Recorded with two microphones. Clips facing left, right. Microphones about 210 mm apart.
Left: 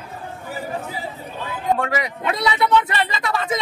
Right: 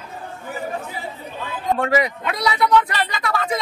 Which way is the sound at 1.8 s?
35° right (ahead or behind).